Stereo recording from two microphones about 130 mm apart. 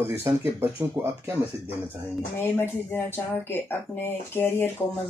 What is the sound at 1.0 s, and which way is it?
Speech, 10° right (ahead or behind).